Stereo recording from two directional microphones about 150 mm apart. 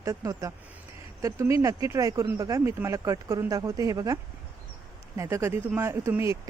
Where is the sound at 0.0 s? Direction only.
20° right (ahead or behind).